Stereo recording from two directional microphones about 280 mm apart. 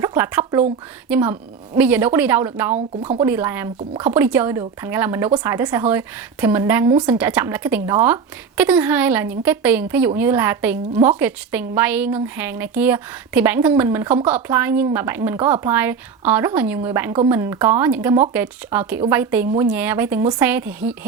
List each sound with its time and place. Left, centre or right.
0.0 s a woman's voice: centre
2.7 s speech: right
3.2 s a woman's voice: centre